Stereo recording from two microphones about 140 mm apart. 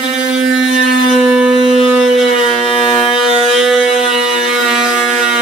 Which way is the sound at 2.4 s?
40° left (ahead or behind).